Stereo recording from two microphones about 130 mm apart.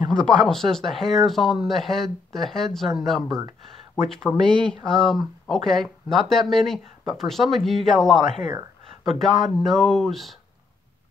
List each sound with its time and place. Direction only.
0.1 s speech: 5° left (ahead or behind)